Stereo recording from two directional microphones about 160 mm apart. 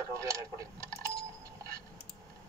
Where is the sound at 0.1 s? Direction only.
20° right (ahead or behind).